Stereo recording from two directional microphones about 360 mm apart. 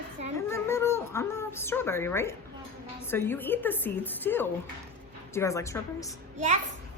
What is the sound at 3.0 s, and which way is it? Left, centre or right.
A woman's voice, centre.